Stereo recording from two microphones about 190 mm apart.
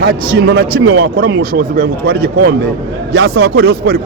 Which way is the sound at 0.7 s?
55° right (ahead or behind).